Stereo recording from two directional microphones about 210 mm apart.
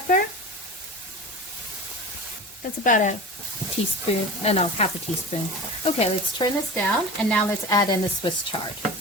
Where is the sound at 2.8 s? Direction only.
35° left (ahead or behind).